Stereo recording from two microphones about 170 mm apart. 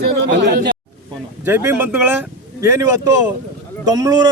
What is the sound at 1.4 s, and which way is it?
A man's voice, 15° right (ahead or behind).